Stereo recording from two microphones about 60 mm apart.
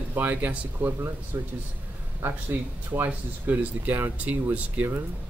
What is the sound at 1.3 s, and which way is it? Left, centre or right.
Speech, right.